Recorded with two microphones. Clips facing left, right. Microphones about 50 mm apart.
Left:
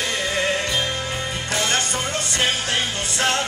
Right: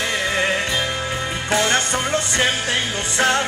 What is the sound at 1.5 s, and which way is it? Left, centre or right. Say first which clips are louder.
Music: right 5 dB; right.